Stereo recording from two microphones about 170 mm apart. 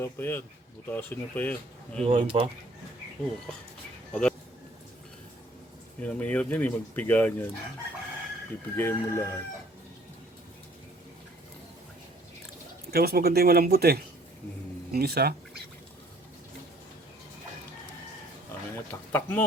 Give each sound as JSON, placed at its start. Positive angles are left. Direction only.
{"t": 0.0, "sound": "speech", "side_deg": 15}
{"t": 2.0, "sound": "speech", "side_deg": -35}
{"t": 4.1, "sound": "speech", "side_deg": 5}
{"t": 6.0, "sound": "speech", "side_deg": 10}
{"t": 8.7, "sound": "speech", "side_deg": 15}
{"t": 12.9, "sound": "speech", "side_deg": -65}
{"t": 19.1, "sound": "speech", "side_deg": 10}